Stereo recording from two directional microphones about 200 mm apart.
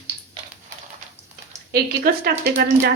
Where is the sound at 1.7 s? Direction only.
50° right (ahead or behind).